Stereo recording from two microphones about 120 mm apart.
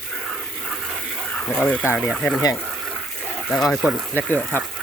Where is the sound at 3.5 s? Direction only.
Centre (ahead or behind).